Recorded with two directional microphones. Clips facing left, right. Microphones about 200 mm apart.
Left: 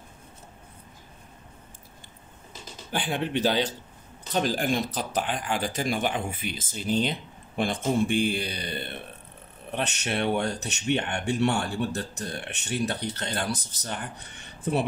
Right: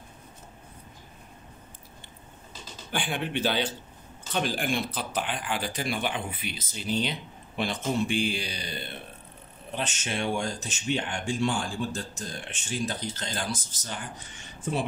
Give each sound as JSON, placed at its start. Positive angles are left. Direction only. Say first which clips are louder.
{"t": 2.9, "sound": "speech", "louder": "left 3 dB", "side_deg": 35}